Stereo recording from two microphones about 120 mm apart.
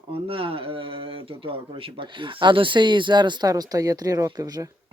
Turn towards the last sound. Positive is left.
turn(degrees=-30)  # may be behind; listen again after turning